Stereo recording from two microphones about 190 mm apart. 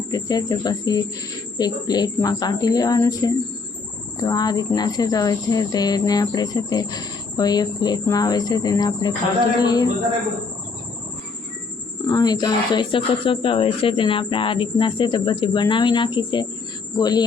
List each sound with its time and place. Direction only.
0.1 s speech: 20° left (ahead or behind)
12.0 s speech: 20° left (ahead or behind)